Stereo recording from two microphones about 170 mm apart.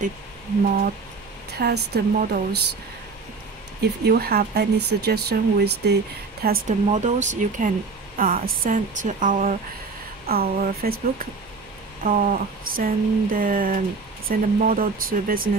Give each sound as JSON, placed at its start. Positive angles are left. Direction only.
{"t": 1.5, "sound": "speech", "side_deg": -70}
{"t": 3.8, "sound": "speech", "side_deg": -70}
{"t": 6.7, "sound": "speech", "side_deg": -45}
{"t": 10.2, "sound": "a sound", "side_deg": -65}